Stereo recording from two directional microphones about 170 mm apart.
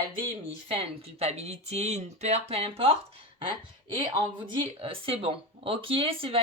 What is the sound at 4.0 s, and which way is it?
Speech, 25° right (ahead or behind).